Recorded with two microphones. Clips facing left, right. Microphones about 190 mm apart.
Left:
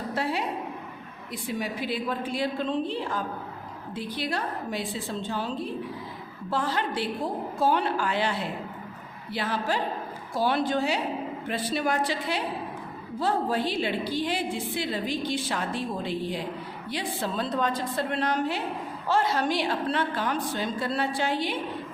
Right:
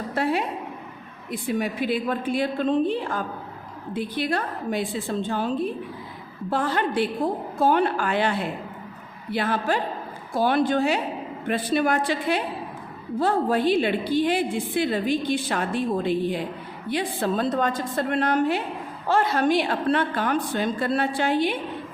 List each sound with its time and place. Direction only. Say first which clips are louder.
0.2 s a woman's voice: right 5 dB; 55° right (ahead or behind)
6.5 s a woman's voice: right 4 dB; 55° right (ahead or behind)